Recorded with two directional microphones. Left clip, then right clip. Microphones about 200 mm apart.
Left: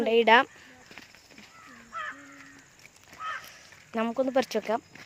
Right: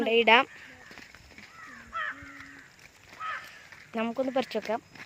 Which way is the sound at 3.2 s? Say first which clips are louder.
Even; 20° left (ahead or behind).